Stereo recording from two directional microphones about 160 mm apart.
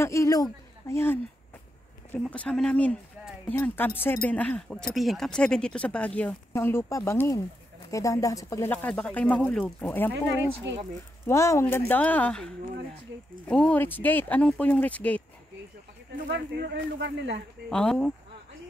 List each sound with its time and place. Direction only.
0.0 s speech: 20° left (ahead or behind)
2.2 s speech: 5° left (ahead or behind)
8.7 s speech: 10° left (ahead or behind)
11.2 s speech: 20° left (ahead or behind)
16.3 s speech: 90° right
17.6 s speech: 5° left (ahead or behind)